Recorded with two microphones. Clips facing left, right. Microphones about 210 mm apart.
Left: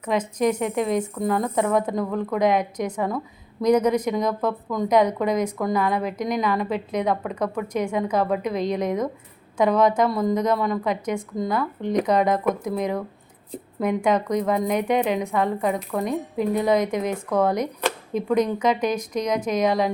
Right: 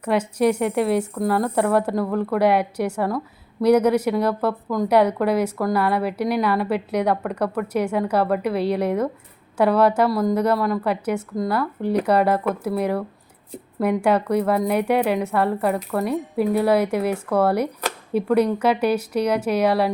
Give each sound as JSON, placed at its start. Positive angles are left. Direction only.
{"t": 0.0, "sound": "speech", "side_deg": -10}